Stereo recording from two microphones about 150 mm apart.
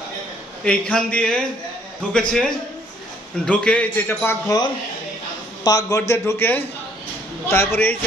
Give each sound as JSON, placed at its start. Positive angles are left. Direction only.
{"t": 0.7, "sound": "a man's voice", "side_deg": 5}
{"t": 5.6, "sound": "a man's voice", "side_deg": 25}